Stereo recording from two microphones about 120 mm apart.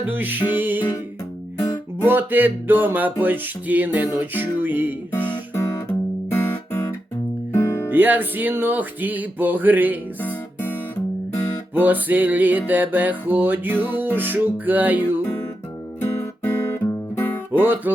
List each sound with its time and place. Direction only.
0.1 s music: 15° right (ahead or behind)
2.0 s music: 15° right (ahead or behind)
5.5 s guitar: 20° left (ahead or behind)
7.5 s music: 25° left (ahead or behind)
7.9 s music: 15° right (ahead or behind)
10.2 s guitar: 15° left (ahead or behind)
11.7 s music: 15° right (ahead or behind)
16.0 s music: 20° left (ahead or behind)
17.6 s music: 15° right (ahead or behind)